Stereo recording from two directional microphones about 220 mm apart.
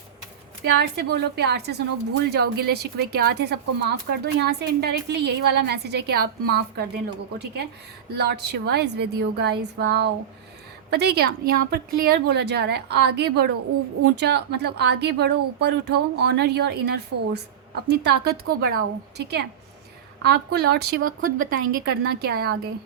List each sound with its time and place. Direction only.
0.6 s a woman's voice: 50° right (ahead or behind)